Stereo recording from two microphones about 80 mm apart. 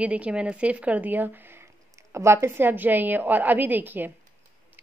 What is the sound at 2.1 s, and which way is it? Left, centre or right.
A woman's voice, right.